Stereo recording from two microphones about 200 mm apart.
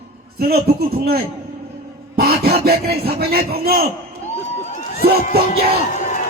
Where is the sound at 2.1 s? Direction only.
50° right (ahead or behind).